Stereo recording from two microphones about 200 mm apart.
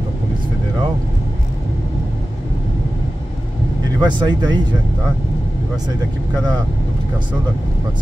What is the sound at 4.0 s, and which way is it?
Speech, 20° right (ahead or behind).